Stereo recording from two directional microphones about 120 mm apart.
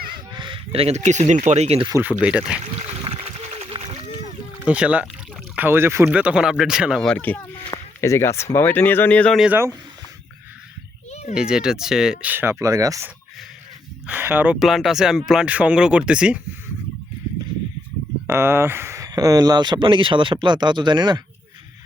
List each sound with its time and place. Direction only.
0.3 s speech: 40° right (ahead or behind); by 1.8 s 65° right (ahead or behind)
2.0 s speech: 15° right (ahead or behind)
3.1 s a sound: 50° right (ahead or behind)
4.6 s speech: 10° right (ahead or behind)
6.1 s speech: 10° right (ahead or behind)
7.0 s speech: 10° left (ahead or behind)
7.7 s speech: 25° left (ahead or behind)
11.1 s a sound: 65° left (ahead or behind)
11.3 s speech: 5° right (ahead or behind); by 13.1 s 30° right (ahead or behind)
14.1 s speech: 15° right (ahead or behind)
14.6 s speech: centre (ahead or behind)
18.3 s speech: 20° right (ahead or behind); by 21.2 s 40° right (ahead or behind)